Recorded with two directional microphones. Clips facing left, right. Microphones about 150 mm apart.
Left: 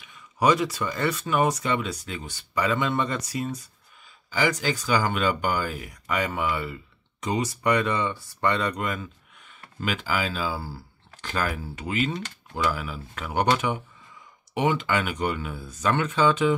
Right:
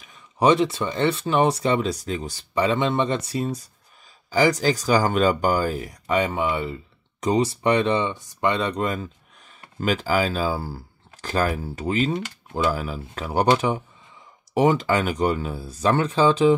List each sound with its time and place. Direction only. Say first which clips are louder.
0.0 s speech: right 3 dB; 30° right (ahead or behind)
7.2 s speech: right 6 dB; 35° right (ahead or behind)